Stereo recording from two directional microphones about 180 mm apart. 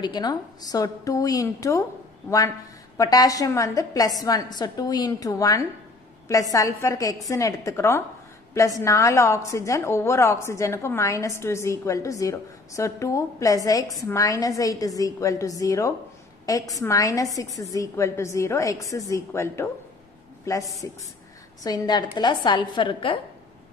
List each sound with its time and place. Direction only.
0.0 s a woman's voice: 25° left (ahead or behind)